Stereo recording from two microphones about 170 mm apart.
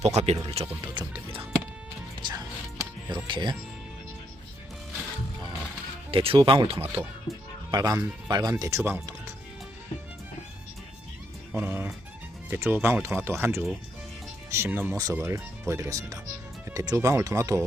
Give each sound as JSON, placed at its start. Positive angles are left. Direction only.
{"t": 0.0, "sound": "speech", "side_deg": -40}
{"t": 2.2, "sound": "music", "side_deg": -25}
{"t": 3.2, "sound": "speech", "side_deg": -30}
{"t": 6.1, "sound": "speech", "side_deg": -35}
{"t": 6.8, "sound": "speech", "side_deg": -10}
{"t": 7.7, "sound": "speech", "side_deg": -20}
{"t": 11.5, "sound": "speech", "side_deg": -10}